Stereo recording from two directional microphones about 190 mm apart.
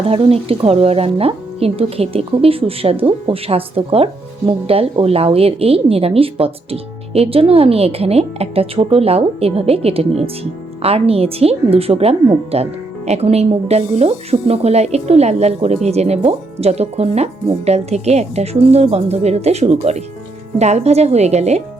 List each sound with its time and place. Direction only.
0.0 s speech: 30° right (ahead or behind)